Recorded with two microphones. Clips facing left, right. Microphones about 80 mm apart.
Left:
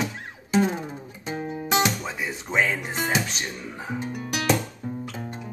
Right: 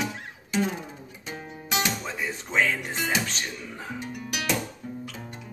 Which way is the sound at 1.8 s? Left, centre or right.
Centre.